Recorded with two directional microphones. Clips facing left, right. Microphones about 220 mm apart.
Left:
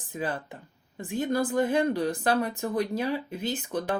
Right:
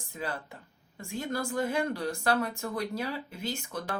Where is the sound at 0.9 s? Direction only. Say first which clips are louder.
Left 7 dB; 20° left (ahead or behind).